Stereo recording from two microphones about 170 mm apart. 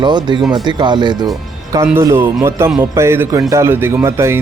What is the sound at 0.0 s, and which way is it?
A man's voice, 25° right (ahead or behind).